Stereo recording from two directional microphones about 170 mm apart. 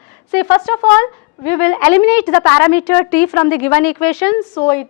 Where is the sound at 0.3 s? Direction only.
10° left (ahead or behind).